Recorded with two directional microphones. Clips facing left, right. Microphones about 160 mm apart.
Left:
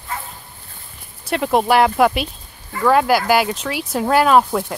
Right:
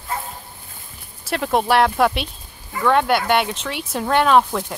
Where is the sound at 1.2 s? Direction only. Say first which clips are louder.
Left 3 dB; centre (ahead or behind).